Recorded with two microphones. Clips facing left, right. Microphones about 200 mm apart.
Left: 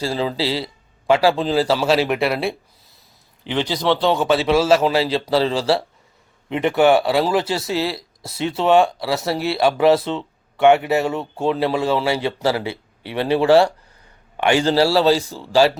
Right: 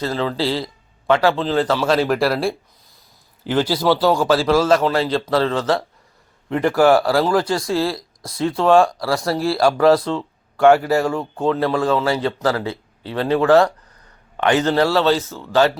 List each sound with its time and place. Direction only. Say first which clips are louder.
0.0 s a man's voice: right 1 dB; 10° left (ahead or behind)
5.5 s a man's voice: even; 30° left (ahead or behind)
6.5 s a man's voice: right 1 dB; centre (ahead or behind)
7.3 s speech: right 2 dB; 25° left (ahead or behind)
7.9 s a sound: right 2 dB; 5° left (ahead or behind)
8.6 s a man's voice: right 1 dB; 5° left (ahead or behind)
10.2 s a sound: right 1 dB; centre (ahead or behind)
10.8 s a man's voice: right 1 dB; 25° left (ahead or behind)
14.9 s speech: left 1 dB; 10° left (ahead or behind)